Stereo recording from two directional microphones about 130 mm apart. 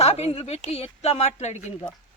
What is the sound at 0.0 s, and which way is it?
A woman's voice, 55° left (ahead or behind).